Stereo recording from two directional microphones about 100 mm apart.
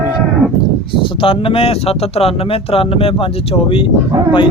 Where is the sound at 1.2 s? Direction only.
65° left (ahead or behind).